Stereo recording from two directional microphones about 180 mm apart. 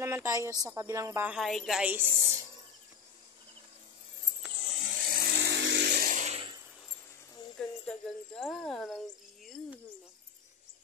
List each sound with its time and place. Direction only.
0.0 s a woman's voice: 15° right (ahead or behind)
4.7 s vehicle: 55° right (ahead or behind); by 6.4 s 40° right (ahead or behind)
7.5 s a sound: 5° left (ahead or behind)